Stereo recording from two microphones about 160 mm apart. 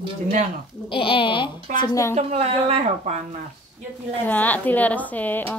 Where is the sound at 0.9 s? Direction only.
35° left (ahead or behind).